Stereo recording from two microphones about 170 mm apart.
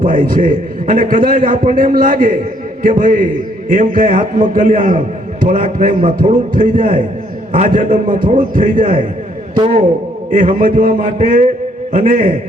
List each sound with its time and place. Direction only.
0.0 s a man's voice: 50° right (ahead or behind)
10.2 s a man's voice: 50° right (ahead or behind)